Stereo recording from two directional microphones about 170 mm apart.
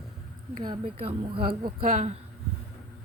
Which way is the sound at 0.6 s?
30° right (ahead or behind).